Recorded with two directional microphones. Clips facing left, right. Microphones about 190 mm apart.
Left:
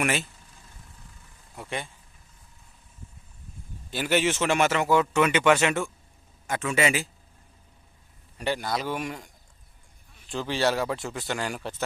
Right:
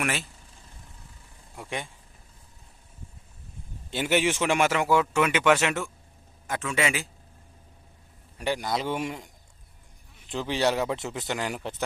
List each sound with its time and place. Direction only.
0.0 s a man's voice: centre (ahead or behind)
1.5 s speech: 10° right (ahead or behind)
3.8 s a man's voice: 25° right (ahead or behind); by 7.1 s centre (ahead or behind)
8.4 s speech: 15° right (ahead or behind)